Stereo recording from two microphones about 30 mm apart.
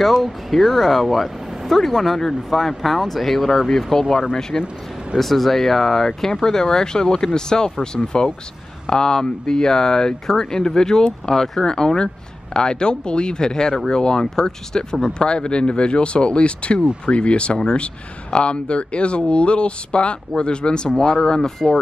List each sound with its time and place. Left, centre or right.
0.0 s speech: centre; by 4.7 s left
5.2 s speech: centre; by 21.5 s left